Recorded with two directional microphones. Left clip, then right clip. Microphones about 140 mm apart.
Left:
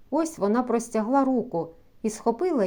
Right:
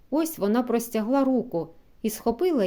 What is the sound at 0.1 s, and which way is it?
A woman's voice, 25° right (ahead or behind).